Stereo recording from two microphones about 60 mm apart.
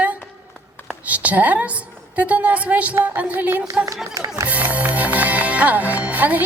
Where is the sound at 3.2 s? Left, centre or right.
Right.